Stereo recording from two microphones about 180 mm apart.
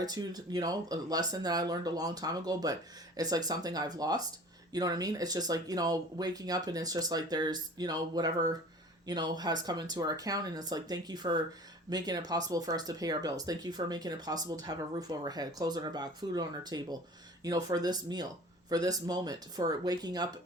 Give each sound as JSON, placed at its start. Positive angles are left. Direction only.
{"t": 0.0, "sound": "speech", "side_deg": -20}